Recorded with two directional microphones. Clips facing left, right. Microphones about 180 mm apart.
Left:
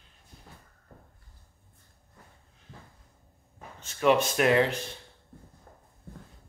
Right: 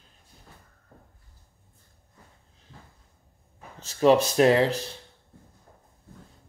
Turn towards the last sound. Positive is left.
turn(degrees=-35)  # may be behind; listen again after turning